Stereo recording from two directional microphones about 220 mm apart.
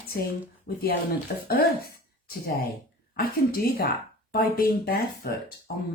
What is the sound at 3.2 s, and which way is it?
Speech, 45° left (ahead or behind).